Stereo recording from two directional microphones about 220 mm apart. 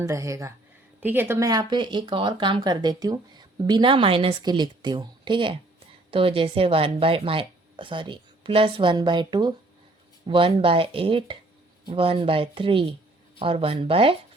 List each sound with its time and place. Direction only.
0.0 s speech: 15° right (ahead or behind)